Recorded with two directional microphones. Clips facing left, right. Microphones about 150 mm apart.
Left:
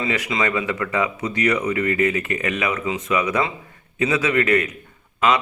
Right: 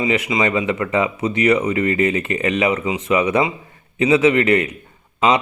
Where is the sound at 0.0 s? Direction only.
20° right (ahead or behind).